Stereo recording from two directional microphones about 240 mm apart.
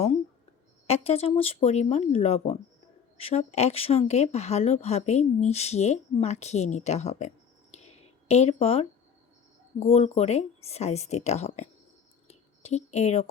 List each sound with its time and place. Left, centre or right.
0.9 s speech: left
8.3 s speech: left
12.3 s a sound: left